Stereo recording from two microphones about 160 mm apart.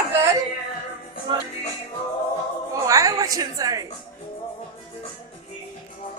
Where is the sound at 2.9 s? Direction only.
20° right (ahead or behind).